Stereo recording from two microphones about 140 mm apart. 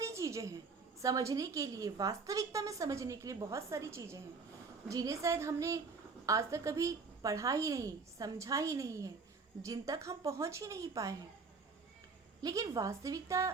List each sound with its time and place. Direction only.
0.0 s a sound: 20° right (ahead or behind)
1.0 s a woman's voice: 25° right (ahead or behind)
12.4 s a woman's voice: 25° right (ahead or behind)